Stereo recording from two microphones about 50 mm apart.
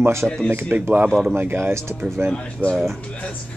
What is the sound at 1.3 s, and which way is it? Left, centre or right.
Speech, right.